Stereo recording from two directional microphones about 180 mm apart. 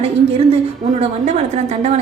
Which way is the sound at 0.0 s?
35° right (ahead or behind).